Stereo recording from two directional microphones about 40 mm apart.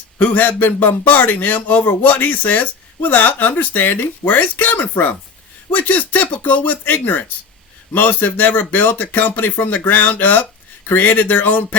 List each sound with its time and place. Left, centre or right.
0.2 s a man's voice: left